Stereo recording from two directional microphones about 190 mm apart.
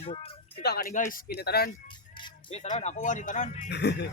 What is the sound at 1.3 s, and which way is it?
Speech, 60° left (ahead or behind).